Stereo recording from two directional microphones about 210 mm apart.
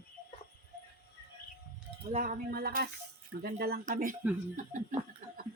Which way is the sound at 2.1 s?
40° right (ahead or behind).